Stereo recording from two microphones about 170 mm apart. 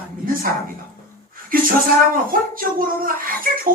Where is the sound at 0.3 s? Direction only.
55° right (ahead or behind).